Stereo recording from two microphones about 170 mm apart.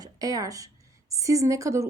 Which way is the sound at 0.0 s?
20° right (ahead or behind).